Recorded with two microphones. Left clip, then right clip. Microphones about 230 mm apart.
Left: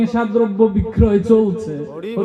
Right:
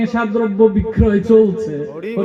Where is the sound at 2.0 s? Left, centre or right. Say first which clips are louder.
Even; centre.